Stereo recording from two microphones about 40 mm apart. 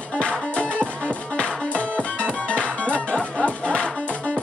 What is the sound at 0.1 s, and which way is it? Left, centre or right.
Music, left.